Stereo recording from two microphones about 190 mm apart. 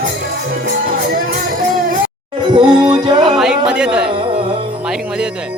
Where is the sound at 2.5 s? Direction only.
25° right (ahead or behind).